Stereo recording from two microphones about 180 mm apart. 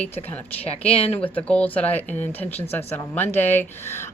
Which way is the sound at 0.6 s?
35° left (ahead or behind).